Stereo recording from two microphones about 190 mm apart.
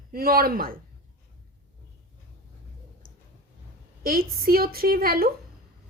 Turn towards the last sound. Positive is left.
turn(degrees=-50)  # may be behind; listen again after turning